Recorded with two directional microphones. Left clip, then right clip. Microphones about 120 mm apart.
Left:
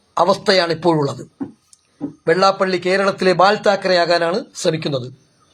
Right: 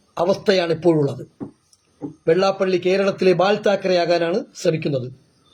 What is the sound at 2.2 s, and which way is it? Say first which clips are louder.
Speech: left 3 dB; 25° right (ahead or behind).